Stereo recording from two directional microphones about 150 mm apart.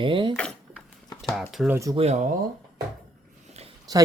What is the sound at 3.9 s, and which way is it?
Speech, 25° right (ahead or behind).